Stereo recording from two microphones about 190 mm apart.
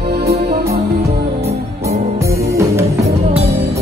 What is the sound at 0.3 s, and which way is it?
Music, 35° right (ahead or behind).